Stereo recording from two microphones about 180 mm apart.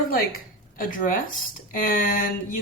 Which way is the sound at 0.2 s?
55° left (ahead or behind).